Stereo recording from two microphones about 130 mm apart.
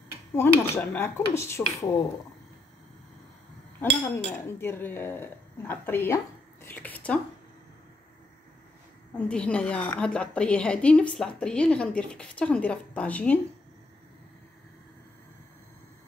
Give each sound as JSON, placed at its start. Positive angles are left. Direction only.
{"t": 0.3, "sound": "a woman's voice", "side_deg": 15}
{"t": 4.1, "sound": "speech", "side_deg": 20}
{"t": 9.1, "sound": "a woman's voice", "side_deg": 10}